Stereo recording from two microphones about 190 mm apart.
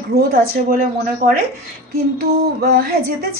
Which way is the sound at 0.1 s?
55° right (ahead or behind).